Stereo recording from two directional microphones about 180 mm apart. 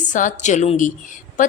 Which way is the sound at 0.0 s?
45° left (ahead or behind).